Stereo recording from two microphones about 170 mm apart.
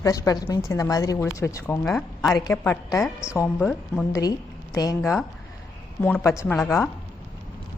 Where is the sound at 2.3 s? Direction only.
20° left (ahead or behind).